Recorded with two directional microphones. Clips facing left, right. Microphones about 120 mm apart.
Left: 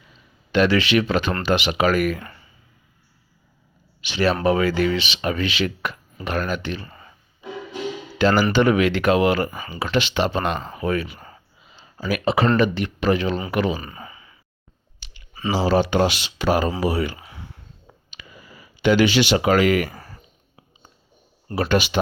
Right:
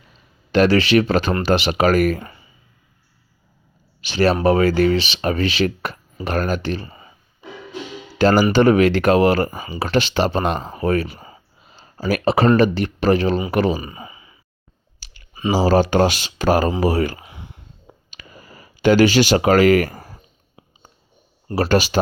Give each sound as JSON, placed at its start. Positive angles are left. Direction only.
{"t": 0.5, "sound": "speech", "side_deg": -40}
{"t": 4.0, "sound": "speech", "side_deg": -40}
{"t": 6.8, "sound": "a sound", "side_deg": -15}
{"t": 8.2, "sound": "speech", "side_deg": -40}
{"t": 11.6, "sound": "a sound", "side_deg": -45}
{"t": 12.5, "sound": "speech", "side_deg": -40}
{"t": 13.7, "sound": "sigh", "side_deg": -15}
{"t": 15.0, "sound": "clicking", "side_deg": -40}
{"t": 15.5, "sound": "speech", "side_deg": -45}
{"t": 17.2, "sound": "a sound", "side_deg": -20}
{"t": 18.1, "sound": "a sound", "side_deg": -45}
{"t": 21.5, "sound": "speech", "side_deg": -40}